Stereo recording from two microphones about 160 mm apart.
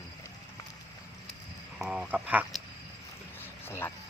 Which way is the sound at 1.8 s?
5° right (ahead or behind).